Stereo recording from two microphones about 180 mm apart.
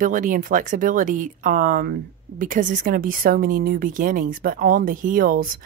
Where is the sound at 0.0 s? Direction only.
45° right (ahead or behind).